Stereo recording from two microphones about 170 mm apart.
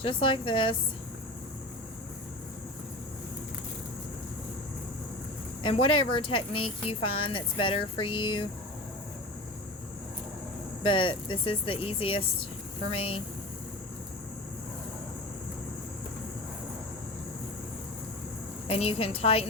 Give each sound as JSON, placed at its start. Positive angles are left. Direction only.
{"t": 0.0, "sound": "speech", "side_deg": 30}
{"t": 5.6, "sound": "speech", "side_deg": 30}
{"t": 10.8, "sound": "speech", "side_deg": 30}
{"t": 18.7, "sound": "speech", "side_deg": 35}